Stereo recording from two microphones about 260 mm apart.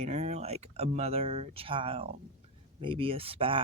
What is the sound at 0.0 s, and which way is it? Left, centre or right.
Speech, right.